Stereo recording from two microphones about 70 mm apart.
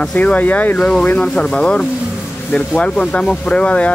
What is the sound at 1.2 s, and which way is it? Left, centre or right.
Speech, centre.